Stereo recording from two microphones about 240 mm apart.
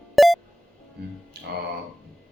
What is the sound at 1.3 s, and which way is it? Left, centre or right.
Speech, right.